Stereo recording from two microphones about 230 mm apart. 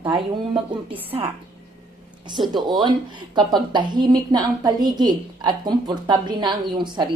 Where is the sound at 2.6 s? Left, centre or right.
Centre.